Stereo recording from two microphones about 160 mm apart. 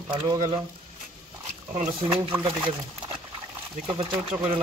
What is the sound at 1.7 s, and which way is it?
Speech, 40° right (ahead or behind).